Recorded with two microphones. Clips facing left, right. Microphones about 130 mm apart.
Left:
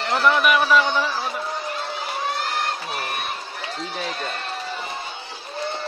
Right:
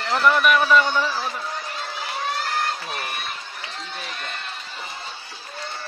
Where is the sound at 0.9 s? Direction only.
Centre (ahead or behind).